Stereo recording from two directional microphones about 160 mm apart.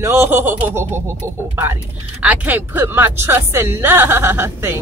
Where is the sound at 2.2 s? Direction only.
10° right (ahead or behind).